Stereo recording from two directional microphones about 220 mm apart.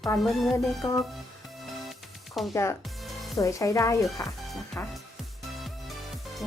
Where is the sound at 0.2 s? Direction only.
Centre (ahead or behind).